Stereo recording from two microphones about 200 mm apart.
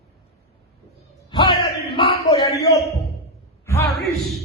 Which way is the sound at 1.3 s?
25° left (ahead or behind).